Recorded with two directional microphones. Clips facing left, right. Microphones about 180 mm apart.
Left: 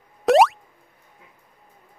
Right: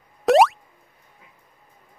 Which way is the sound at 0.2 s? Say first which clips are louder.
Even; centre (ahead or behind).